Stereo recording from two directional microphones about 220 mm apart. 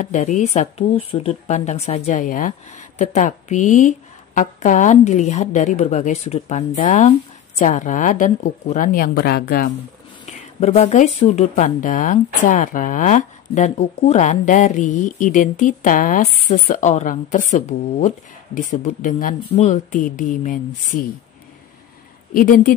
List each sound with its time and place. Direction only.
0.0 s speech: 35° left (ahead or behind)
10.2 s speech: 30° left (ahead or behind)
22.3 s speech: 40° left (ahead or behind)